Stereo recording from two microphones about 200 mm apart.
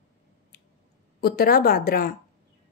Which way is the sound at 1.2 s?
50° left (ahead or behind).